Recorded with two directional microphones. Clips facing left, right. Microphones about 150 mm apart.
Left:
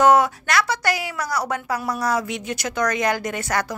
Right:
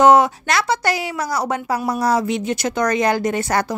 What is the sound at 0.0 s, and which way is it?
A woman's voice, 25° right (ahead or behind).